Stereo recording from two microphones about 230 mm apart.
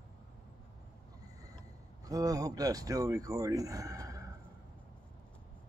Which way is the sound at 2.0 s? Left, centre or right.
Centre.